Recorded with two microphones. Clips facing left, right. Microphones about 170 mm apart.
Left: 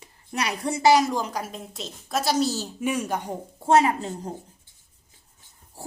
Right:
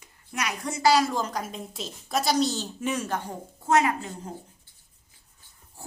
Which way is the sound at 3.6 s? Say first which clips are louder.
Left 3 dB; 30° left (ahead or behind).